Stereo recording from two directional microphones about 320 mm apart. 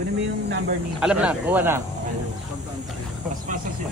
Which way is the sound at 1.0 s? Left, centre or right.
Centre.